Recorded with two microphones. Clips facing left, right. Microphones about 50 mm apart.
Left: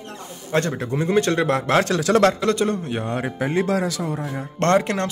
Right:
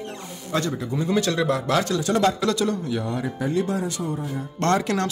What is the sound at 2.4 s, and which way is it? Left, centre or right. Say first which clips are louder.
Speech: left 2 dB; left.